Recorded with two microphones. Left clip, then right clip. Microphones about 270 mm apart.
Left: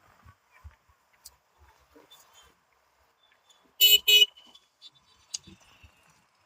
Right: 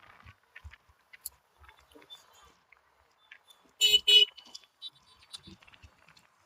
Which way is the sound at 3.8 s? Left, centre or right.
Left.